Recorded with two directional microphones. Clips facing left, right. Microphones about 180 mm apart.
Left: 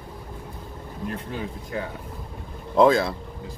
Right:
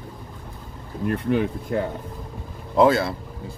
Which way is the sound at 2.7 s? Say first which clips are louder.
Even; centre (ahead or behind).